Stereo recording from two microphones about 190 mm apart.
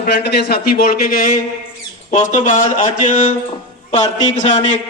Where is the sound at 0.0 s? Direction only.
60° left (ahead or behind).